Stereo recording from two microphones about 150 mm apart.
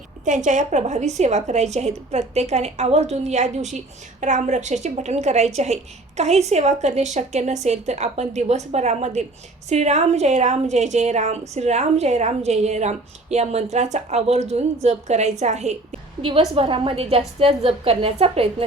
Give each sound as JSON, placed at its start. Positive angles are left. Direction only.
{"t": 0.3, "sound": "a woman's voice", "side_deg": -55}
{"t": 16.2, "sound": "a woman's voice", "side_deg": -40}